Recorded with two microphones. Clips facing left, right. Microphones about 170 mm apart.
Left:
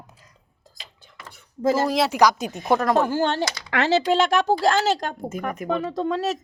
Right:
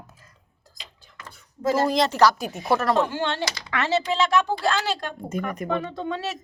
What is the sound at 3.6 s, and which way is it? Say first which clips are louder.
Speech: left 4 dB; 70° left (ahead or behind).